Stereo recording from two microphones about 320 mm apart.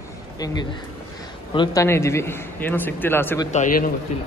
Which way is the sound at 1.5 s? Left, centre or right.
Centre.